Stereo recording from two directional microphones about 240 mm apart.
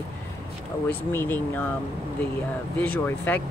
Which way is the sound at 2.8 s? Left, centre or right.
Centre.